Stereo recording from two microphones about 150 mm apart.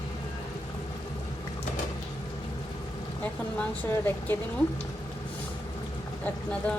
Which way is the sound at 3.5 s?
10° left (ahead or behind).